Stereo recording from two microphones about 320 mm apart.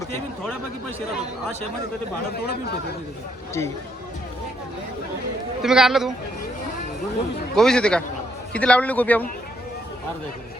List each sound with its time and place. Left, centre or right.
2.3 s speech: left
5.6 s a man's voice: centre
7.5 s a man's voice: centre